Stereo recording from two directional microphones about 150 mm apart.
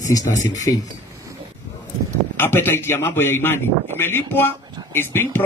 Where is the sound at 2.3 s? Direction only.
15° left (ahead or behind).